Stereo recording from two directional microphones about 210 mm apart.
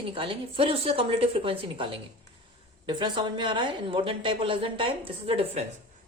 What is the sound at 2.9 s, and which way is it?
Speech, 20° right (ahead or behind).